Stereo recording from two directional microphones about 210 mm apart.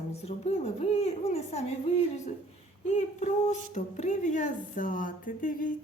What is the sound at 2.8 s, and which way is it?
Speech, 35° left (ahead or behind).